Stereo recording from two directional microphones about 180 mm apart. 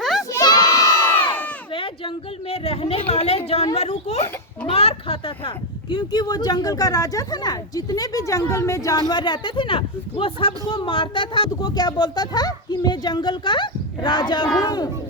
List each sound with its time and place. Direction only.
0.0 s crowd: centre (ahead or behind)
0.3 s crowd: 20° left (ahead or behind)
1.7 s speech: 30° left (ahead or behind)